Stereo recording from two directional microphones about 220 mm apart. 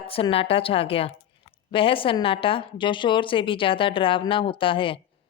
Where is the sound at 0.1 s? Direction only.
25° left (ahead or behind).